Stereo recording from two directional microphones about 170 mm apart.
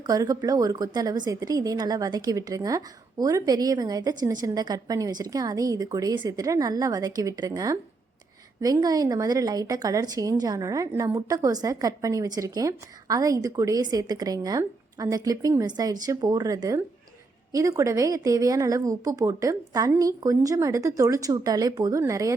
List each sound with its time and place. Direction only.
0.0 s speech: 20° right (ahead or behind)